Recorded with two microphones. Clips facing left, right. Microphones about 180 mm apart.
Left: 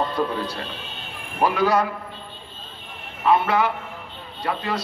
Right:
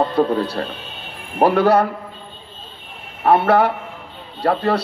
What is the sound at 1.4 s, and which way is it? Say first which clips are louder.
Speech: right 6 dB; 60° right (ahead or behind).